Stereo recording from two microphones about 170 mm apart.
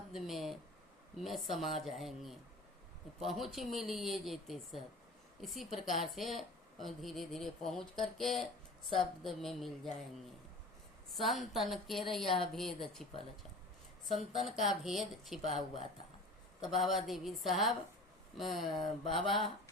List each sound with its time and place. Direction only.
0.1 s speech: centre (ahead or behind)
11.1 s speech: centre (ahead or behind)
14.1 s speech: centre (ahead or behind)
16.6 s speech: centre (ahead or behind)
19.0 s speech: 30° left (ahead or behind)